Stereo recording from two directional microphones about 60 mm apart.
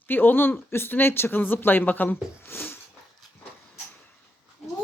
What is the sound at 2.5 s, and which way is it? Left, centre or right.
Speech, left.